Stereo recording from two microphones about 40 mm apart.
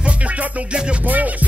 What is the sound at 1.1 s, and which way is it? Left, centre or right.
Music, right.